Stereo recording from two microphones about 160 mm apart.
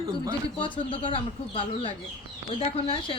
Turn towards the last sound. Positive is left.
turn(degrees=35)  # may be behind; listen again after turning